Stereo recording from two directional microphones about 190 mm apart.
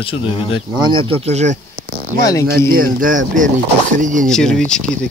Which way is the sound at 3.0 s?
45° right (ahead or behind).